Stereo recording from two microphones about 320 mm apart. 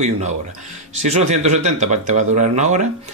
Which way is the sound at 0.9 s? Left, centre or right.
Right.